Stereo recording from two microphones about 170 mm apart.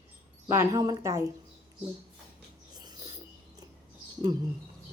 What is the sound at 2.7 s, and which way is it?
Rodents, 25° right (ahead or behind).